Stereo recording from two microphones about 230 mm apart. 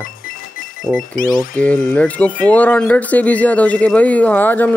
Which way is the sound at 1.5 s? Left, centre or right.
Centre.